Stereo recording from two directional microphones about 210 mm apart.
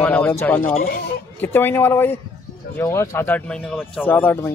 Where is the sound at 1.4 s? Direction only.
10° left (ahead or behind).